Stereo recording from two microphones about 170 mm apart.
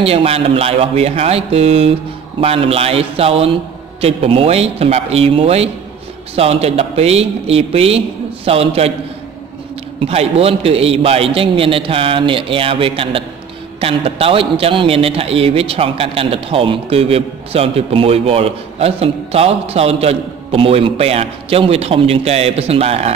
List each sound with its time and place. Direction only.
0.0 s a man's voice: 35° right (ahead or behind)
9.9 s a man's voice: 35° right (ahead or behind)